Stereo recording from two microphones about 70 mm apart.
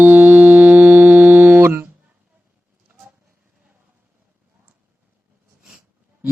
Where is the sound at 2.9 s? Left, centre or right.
Right.